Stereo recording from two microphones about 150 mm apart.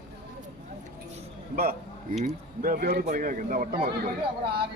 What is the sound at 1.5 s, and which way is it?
A man's voice, 80° right.